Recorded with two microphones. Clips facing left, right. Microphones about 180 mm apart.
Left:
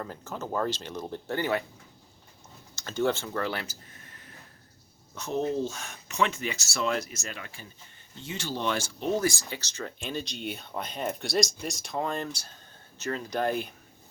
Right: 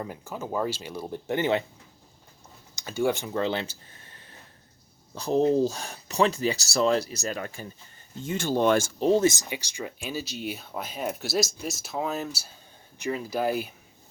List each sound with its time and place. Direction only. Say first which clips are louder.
0.0 s speech: right 2 dB; 10° right (ahead or behind)
2.7 s speech: right 1 dB; 10° right (ahead or behind); by 9.0 s 50° right (ahead or behind)
9.0 s speech: right 6 dB; 25° right (ahead or behind); by 13.7 s 5° right (ahead or behind)